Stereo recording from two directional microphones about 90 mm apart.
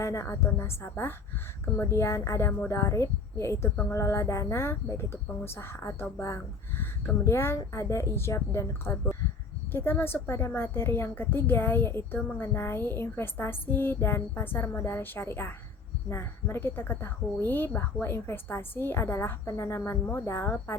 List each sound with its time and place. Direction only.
0.0 s a woman's voice: 35° left (ahead or behind)